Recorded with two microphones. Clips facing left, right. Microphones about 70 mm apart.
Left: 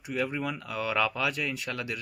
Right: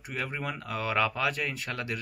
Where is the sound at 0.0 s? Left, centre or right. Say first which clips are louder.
Left 4 dB; right.